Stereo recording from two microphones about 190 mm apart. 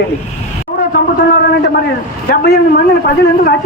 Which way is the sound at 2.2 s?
55° left (ahead or behind).